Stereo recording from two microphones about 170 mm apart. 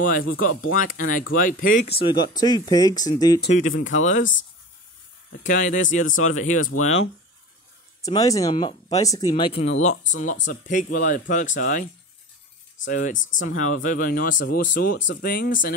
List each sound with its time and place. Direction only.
0.0 s speech: 55° left (ahead or behind)
1.9 s speech: 30° left (ahead or behind)
3.5 s speech: 45° left (ahead or behind)
4.2 s speech: 90° left
5.4 s speech: 45° left (ahead or behind)
8.0 s speech: 20° left (ahead or behind)
9.5 s speech: 75° left (ahead or behind)
9.8 s speech: 45° left (ahead or behind)
12.8 s speech: 50° left (ahead or behind)